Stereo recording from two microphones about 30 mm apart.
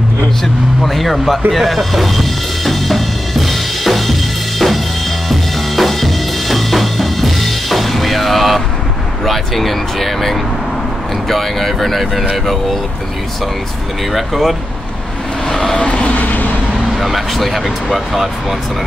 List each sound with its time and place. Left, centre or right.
0.8 s speech: centre
1.5 s drum: centre
9.2 s speech: centre
14.1 s speech: centre
15.5 s vehicle: centre
15.8 s vehicle: left
16.2 s vehicle: left
16.9 s speech: centre